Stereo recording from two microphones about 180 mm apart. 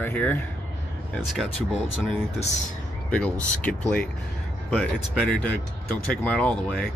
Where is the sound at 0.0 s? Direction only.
10° left (ahead or behind).